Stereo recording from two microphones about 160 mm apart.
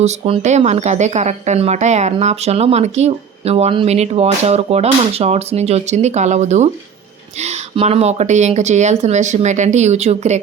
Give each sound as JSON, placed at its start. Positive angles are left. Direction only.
{"t": 0.0, "sound": "speech", "side_deg": -45}